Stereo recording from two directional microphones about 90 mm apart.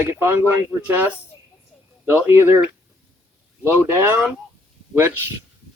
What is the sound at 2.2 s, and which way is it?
Speech, 25° right (ahead or behind).